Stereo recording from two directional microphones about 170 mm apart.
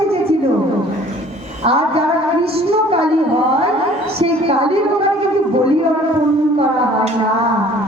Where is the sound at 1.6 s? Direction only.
35° right (ahead or behind).